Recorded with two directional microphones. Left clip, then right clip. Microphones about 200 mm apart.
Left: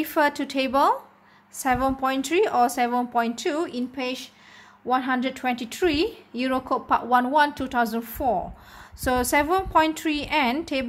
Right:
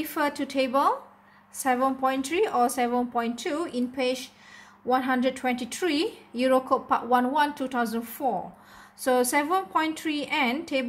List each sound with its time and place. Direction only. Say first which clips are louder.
0.0 s a woman's voice: left 5 dB; 25° left (ahead or behind)